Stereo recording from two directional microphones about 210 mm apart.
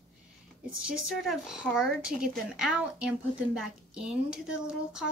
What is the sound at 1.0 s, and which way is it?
A woman's voice, 5° right (ahead or behind).